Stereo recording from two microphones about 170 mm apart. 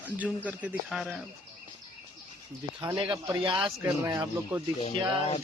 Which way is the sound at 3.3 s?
25° right (ahead or behind).